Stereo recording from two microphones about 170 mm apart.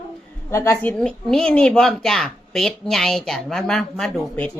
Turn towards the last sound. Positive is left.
turn(degrees=5)  # may be behind; listen again after turning